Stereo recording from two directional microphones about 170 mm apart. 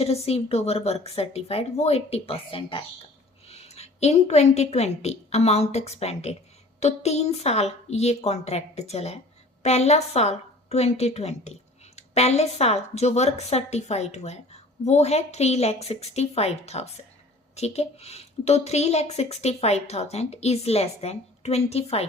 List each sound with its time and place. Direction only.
0.0 s a woman's voice: 35° left (ahead or behind)